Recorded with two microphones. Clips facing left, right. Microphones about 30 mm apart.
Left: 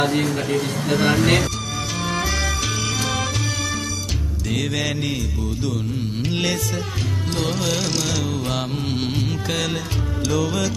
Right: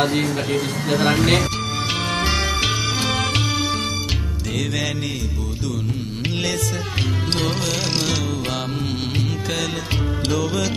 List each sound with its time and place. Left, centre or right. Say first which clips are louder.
2.3 s music: right 3 dB; right
4.5 s music: left 1 dB; centre
6.3 s music: left 1 dB; centre
7.9 s music: right 1 dB; right
8.2 s music: even; centre
10.3 s music: left 1 dB; centre